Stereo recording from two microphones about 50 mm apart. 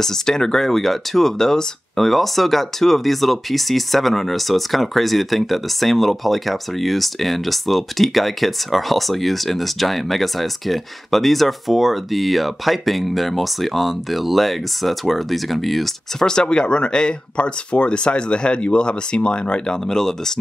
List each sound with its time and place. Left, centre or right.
0.0 s speech: centre
16.3 s speech: centre